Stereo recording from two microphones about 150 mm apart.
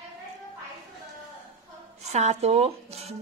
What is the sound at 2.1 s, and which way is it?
Speech, 50° right (ahead or behind).